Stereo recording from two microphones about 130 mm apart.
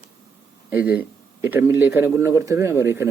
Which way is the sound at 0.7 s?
10° right (ahead or behind).